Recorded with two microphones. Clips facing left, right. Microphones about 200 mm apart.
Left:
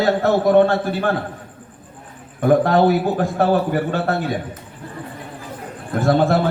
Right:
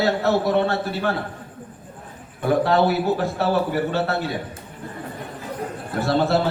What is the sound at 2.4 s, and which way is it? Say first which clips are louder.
A man's voice: left 4 dB; 50° left (ahead or behind).